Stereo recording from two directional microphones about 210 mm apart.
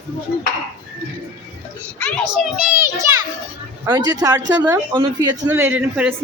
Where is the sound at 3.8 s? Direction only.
20° right (ahead or behind).